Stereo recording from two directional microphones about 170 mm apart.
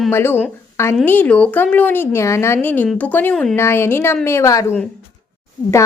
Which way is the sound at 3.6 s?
15° left (ahead or behind).